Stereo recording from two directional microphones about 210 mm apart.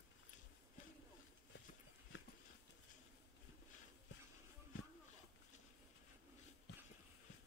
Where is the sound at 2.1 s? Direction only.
60° left (ahead or behind).